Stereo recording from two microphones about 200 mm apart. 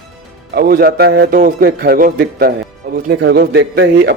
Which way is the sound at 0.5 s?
50° right (ahead or behind).